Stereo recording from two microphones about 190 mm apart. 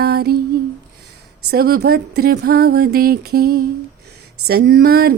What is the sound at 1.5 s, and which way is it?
Speech, 55° right (ahead or behind).